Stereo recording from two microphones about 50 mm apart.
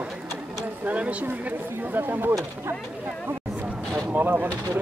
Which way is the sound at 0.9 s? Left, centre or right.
Right.